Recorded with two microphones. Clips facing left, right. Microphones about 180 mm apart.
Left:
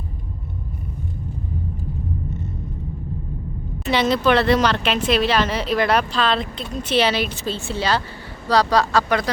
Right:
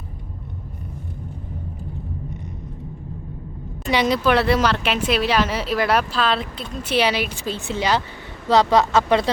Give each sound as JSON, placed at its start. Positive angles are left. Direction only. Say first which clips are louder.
{"t": 3.8, "sound": "a woman's voice", "louder": "left 1 dB", "side_deg": -10}